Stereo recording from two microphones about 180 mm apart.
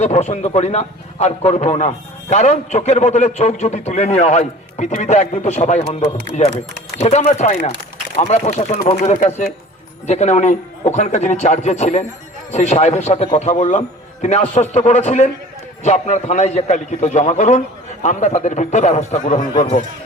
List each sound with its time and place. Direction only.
0.0 s a man's voice: 40° left (ahead or behind)
7.3 s a man's voice: 40° left (ahead or behind)
19.5 s a man's voice: 30° left (ahead or behind)